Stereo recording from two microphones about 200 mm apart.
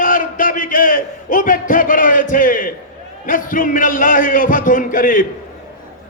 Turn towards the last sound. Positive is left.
turn(degrees=40)  # may be behind; listen again after turning